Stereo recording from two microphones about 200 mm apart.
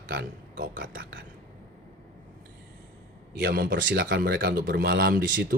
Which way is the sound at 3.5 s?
50° right (ahead or behind).